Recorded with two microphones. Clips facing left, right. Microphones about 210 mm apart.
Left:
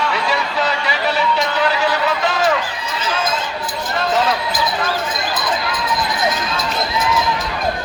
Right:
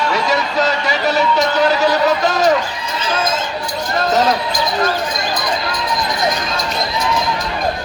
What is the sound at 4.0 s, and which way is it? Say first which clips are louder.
Speech: right 3 dB; 40° right (ahead or behind).